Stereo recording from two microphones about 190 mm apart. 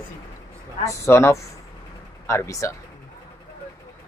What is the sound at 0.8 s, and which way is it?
Speech, 15° left (ahead or behind).